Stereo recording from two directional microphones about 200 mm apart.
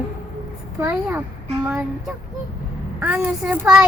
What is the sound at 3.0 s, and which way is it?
Speech, 5° right (ahead or behind).